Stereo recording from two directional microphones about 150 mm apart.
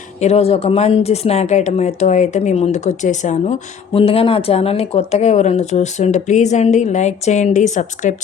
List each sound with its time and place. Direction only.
0.2 s speech: 45° left (ahead or behind)
3.9 s speech: 40° left (ahead or behind)